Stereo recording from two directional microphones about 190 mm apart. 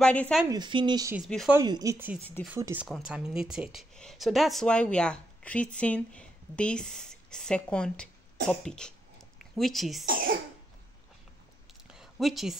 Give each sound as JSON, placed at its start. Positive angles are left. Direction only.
{"t": 0.0, "sound": "speech", "side_deg": 5}
{"t": 0.5, "sound": "speech", "side_deg": -25}
{"t": 1.1, "sound": "speech", "side_deg": 0}
{"t": 1.5, "sound": "speech", "side_deg": -20}
{"t": 10.0, "sound": "cough", "side_deg": -50}
{"t": 11.9, "sound": "a sound", "side_deg": 0}